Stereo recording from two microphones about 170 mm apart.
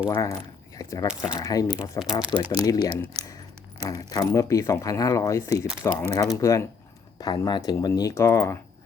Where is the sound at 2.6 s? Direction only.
20° left (ahead or behind).